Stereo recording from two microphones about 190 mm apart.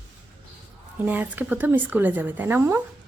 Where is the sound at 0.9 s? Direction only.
10° right (ahead or behind).